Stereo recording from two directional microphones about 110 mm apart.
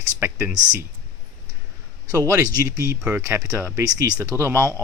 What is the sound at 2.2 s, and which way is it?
Speech, 30° right (ahead or behind).